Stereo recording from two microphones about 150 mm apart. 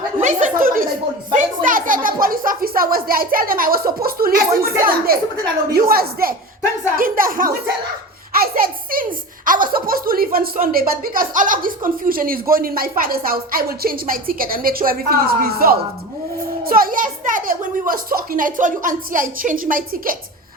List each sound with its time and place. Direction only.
0.2 s a woman's voice: 55° right (ahead or behind); by 7.5 s 70° right (ahead or behind)
8.4 s a sound: 75° right (ahead or behind)
9.5 s speech: 70° right (ahead or behind); by 15.8 s 85° right
16.6 s a child's voice: 75° right (ahead or behind)